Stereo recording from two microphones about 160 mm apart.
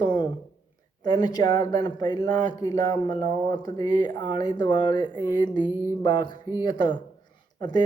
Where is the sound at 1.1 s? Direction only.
25° left (ahead or behind).